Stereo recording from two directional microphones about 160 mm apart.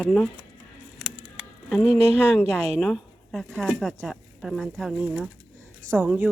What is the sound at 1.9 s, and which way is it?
Speech, 40° right (ahead or behind).